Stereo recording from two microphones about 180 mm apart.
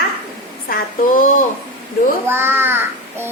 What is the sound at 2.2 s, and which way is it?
A child's voice, 15° right (ahead or behind).